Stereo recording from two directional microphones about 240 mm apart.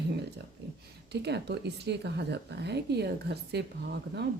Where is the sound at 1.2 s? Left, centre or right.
Right.